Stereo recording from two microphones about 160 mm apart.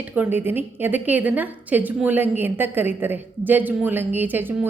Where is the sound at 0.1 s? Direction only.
10° right (ahead or behind).